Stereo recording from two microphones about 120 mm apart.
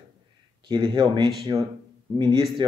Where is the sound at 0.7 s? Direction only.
40° right (ahead or behind).